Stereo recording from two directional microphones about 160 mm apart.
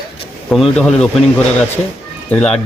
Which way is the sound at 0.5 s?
Centre (ahead or behind).